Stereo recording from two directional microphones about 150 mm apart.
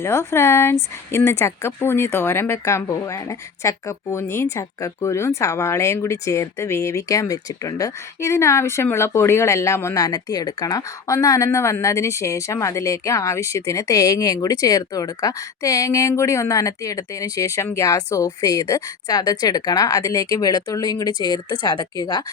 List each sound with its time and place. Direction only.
0.0 s speech: 20° left (ahead or behind)